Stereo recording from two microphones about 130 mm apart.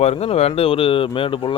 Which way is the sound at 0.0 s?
55° left (ahead or behind).